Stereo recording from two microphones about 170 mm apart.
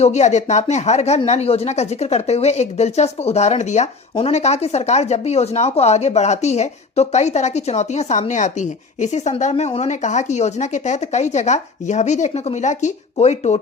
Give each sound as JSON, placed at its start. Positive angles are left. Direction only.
{"t": 0.0, "sound": "speech", "side_deg": 45}